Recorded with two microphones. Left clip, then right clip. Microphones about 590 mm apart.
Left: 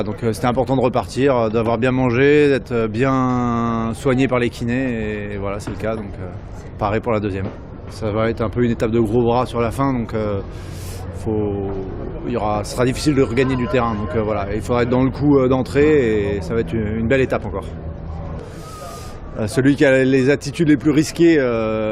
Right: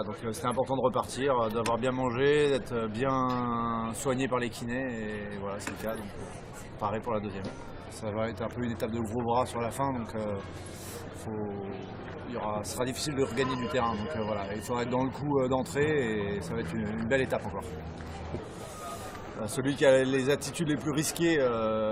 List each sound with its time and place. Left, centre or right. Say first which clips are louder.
0.0 s speech: left 13 dB; left
12.3 s speech: left 13 dB; left
19.5 s speech: left 9 dB; left